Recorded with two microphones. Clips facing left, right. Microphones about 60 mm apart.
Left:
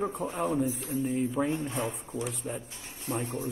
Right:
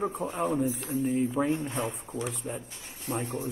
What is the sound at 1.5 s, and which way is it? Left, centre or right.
Speech, right.